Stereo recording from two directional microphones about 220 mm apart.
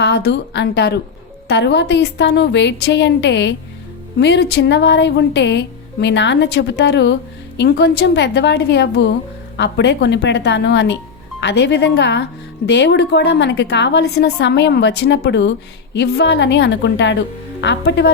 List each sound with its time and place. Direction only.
0.0 s speech: 50° left (ahead or behind)